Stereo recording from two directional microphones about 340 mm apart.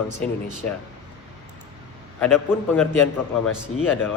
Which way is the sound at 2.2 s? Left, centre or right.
Centre.